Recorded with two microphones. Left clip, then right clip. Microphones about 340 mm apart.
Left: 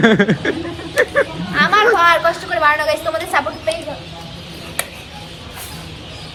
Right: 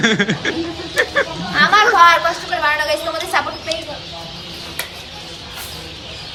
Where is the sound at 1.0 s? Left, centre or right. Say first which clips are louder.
Left 2 dB; centre.